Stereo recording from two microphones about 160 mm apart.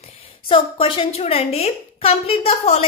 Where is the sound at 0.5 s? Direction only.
30° left (ahead or behind).